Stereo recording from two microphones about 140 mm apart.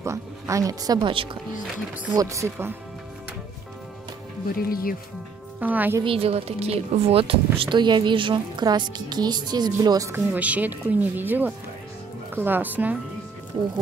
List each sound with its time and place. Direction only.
0.0 s speech: 20° right (ahead or behind)
1.1 s speech: 40° right (ahead or behind)
2.1 s speech: 20° right (ahead or behind)
4.6 s speech: 90° left
5.6 s speech: 10° right (ahead or behind)
6.0 s speech: 45° right (ahead or behind); by 12.9 s 15° right (ahead or behind)